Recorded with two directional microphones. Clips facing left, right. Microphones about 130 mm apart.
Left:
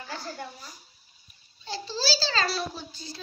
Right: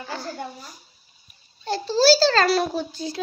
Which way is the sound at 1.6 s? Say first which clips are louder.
Right 12 dB; 55° right (ahead or behind).